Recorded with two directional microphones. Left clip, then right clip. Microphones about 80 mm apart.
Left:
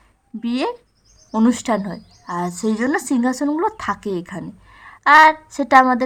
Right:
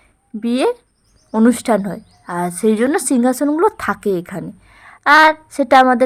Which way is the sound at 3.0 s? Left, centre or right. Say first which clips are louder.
Right 4 dB; right.